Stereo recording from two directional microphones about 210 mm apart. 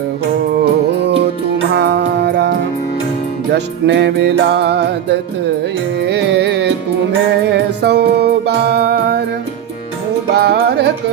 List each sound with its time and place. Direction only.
0.9 s music: 55° right (ahead or behind)
10.3 s music: 50° right (ahead or behind)